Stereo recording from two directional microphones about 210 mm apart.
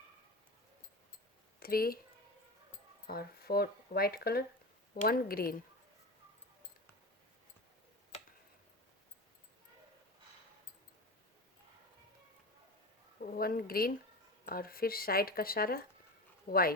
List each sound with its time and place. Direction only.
1.5 s speech: 45° left (ahead or behind)
3.1 s speech: 45° left (ahead or behind)
13.3 s speech: 45° left (ahead or behind)